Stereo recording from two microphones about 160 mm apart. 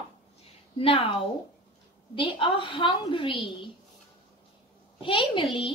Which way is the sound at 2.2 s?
30° left (ahead or behind).